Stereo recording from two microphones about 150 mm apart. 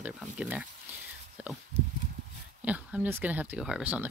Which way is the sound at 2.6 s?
10° right (ahead or behind).